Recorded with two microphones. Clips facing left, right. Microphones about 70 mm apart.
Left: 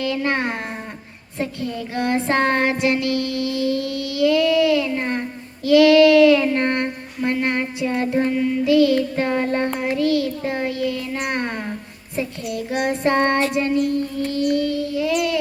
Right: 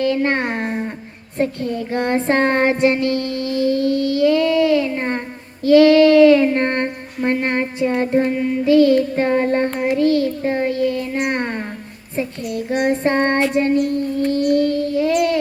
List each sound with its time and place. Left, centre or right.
0.0 s speech: right
1.4 s child singing: right
4.9 s a sound: right
5.6 s child singing: right